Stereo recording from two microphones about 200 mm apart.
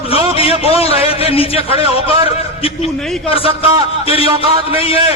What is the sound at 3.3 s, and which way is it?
A man's voice, 30° left (ahead or behind).